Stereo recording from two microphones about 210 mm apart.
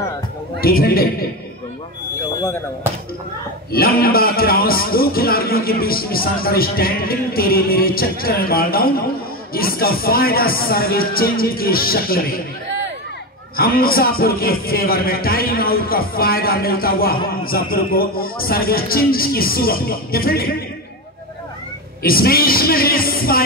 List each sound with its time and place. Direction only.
0.6 s speech: 45° left (ahead or behind)
4.0 s speech: 45° left (ahead or behind)
12.6 s a sound: 55° right (ahead or behind)
13.6 s speech: 45° left (ahead or behind)
22.0 s speech: 45° left (ahead or behind)